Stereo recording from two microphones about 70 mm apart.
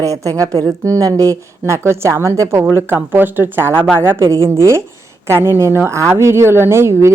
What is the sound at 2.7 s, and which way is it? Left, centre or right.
A woman's voice, right.